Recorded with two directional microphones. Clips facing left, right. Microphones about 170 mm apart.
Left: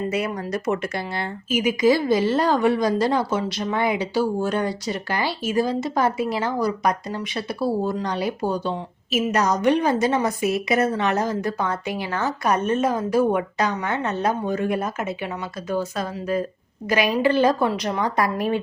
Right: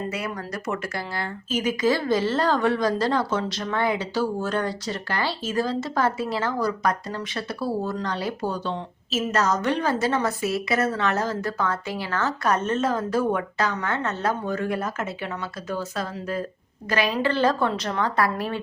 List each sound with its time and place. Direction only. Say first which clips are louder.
0.1 s speech: left 6 dB; 20° left (ahead or behind)
1.5 s speech: left 4 dB; 10° left (ahead or behind)